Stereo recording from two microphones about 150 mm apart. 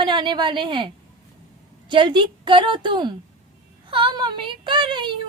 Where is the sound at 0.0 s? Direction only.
30° right (ahead or behind).